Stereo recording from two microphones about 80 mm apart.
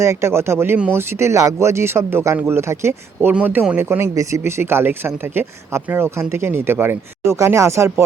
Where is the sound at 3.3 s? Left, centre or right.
Right.